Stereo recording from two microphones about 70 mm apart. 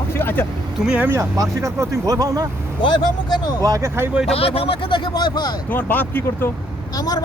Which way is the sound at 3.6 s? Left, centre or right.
Right.